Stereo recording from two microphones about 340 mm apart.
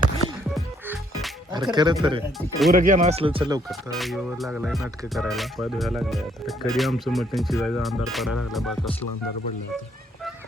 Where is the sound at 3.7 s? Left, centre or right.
Centre.